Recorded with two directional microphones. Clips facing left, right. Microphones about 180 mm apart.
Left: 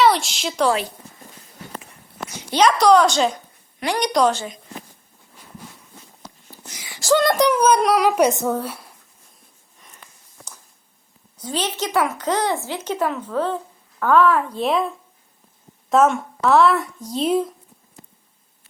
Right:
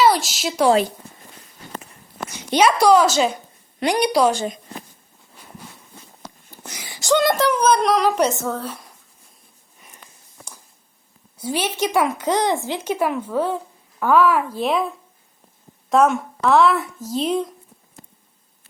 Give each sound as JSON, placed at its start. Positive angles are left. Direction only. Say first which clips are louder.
{"t": 0.0, "sound": "speech", "louder": "even", "side_deg": 0}
{"t": 2.5, "sound": "speech", "louder": "even", "side_deg": -10}
{"t": 6.2, "sound": "a sound", "louder": "right 3 dB", "side_deg": -65}
{"t": 7.0, "sound": "speech", "louder": "even", "side_deg": 0}
{"t": 7.3, "sound": "speech", "louder": "left 1 dB", "side_deg": 10}
{"t": 11.3, "sound": "a woman's voice", "louder": "right 2 dB", "side_deg": -10}